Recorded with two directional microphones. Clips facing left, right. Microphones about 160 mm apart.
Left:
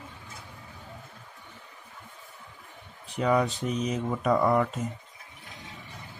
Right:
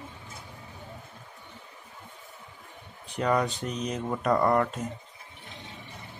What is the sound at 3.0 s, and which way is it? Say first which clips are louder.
Speech: left 1 dB; centre (ahead or behind).